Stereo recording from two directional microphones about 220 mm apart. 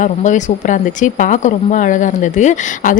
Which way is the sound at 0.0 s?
35° left (ahead or behind).